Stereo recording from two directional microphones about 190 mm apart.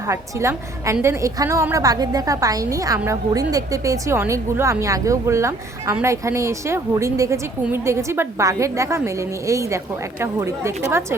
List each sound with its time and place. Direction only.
0.0 s a woman's voice: 15° right (ahead or behind)